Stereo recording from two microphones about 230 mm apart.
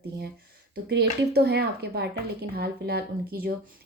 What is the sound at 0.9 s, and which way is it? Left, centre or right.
A woman's voice, right.